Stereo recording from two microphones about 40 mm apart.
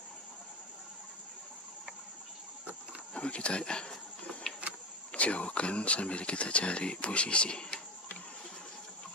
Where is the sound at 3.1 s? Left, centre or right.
Left.